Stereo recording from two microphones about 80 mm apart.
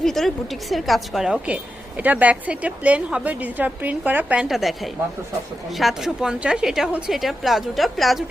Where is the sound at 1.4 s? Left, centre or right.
Centre.